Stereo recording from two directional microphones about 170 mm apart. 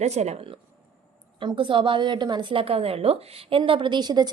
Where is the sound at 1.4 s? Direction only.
30° right (ahead or behind).